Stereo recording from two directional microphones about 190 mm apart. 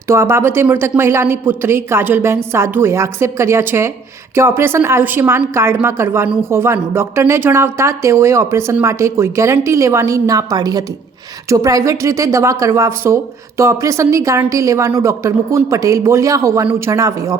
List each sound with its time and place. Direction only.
0.1 s speech: 15° right (ahead or behind)